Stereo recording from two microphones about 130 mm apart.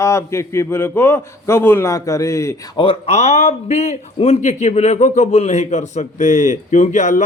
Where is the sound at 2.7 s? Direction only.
45° left (ahead or behind).